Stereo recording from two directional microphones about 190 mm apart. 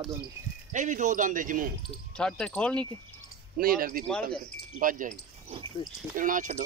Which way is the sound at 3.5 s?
50° right (ahead or behind).